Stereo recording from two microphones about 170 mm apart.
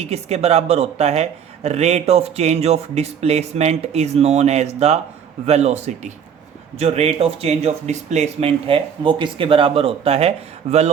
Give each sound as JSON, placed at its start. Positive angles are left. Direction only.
{"t": 0.0, "sound": "speech", "side_deg": -40}